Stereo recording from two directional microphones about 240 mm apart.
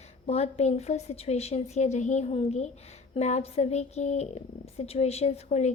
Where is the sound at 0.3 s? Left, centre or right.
Left.